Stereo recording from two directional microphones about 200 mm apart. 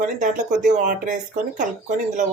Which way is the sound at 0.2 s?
40° right (ahead or behind).